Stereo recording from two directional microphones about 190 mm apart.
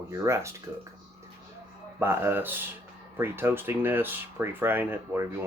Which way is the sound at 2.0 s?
10° right (ahead or behind).